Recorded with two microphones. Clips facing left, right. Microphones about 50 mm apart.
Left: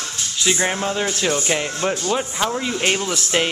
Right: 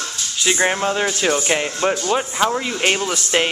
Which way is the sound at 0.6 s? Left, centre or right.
Centre.